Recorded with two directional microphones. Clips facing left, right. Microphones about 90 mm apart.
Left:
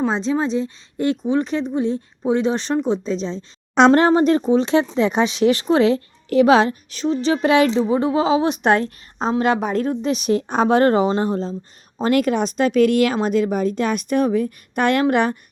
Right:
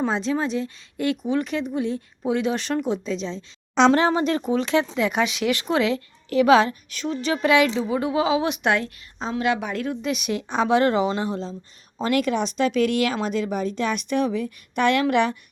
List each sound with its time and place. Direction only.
0.1 s speech: 25° left (ahead or behind)
3.8 s speech: 50° left (ahead or behind)